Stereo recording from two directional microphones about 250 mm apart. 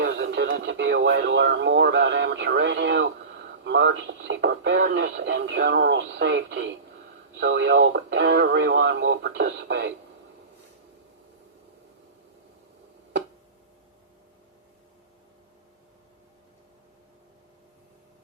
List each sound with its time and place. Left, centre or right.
0.0 s speech: right